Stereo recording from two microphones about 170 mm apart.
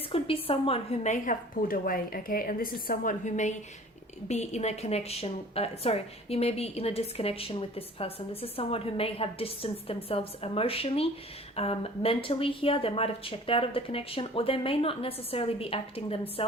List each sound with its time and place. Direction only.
0.1 s a woman's voice: 30° left (ahead or behind)